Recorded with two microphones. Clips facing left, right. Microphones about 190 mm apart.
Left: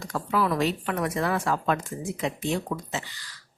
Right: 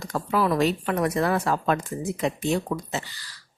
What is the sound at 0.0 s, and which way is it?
A woman's voice, 35° right (ahead or behind).